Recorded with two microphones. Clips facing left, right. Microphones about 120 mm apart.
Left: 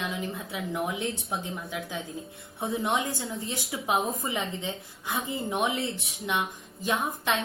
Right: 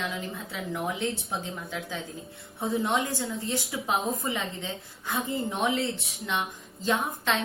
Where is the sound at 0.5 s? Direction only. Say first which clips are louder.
Even; 20° left (ahead or behind).